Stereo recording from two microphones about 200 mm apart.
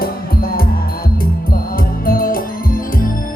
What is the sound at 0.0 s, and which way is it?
Music, 50° left (ahead or behind).